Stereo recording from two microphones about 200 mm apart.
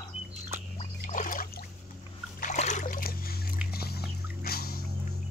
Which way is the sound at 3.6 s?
50° left (ahead or behind).